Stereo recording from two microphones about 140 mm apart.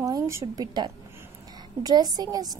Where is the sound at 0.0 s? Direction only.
20° right (ahead or behind).